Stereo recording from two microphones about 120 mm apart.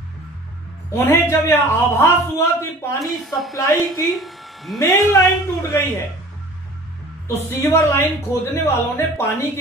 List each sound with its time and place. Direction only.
0.9 s a man's voice: 20° left (ahead or behind)
3.0 s a woman's voice: centre (ahead or behind)
3.5 s a man's voice: 25° left (ahead or behind)
4.0 s speech: centre (ahead or behind)
4.7 s a man's voice: 25° left (ahead or behind)
7.2 s a man's voice: 25° left (ahead or behind)